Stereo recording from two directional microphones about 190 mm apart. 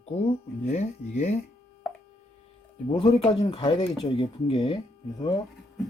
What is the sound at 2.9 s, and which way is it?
Speech, 30° left (ahead or behind).